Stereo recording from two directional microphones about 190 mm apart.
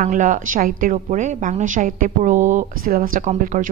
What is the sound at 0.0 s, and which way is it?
A woman's voice, 45° right (ahead or behind).